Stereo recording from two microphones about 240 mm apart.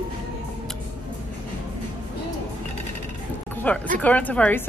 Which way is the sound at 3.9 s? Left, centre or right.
Centre.